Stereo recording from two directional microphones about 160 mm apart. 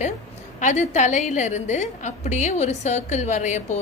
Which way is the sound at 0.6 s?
50° left (ahead or behind).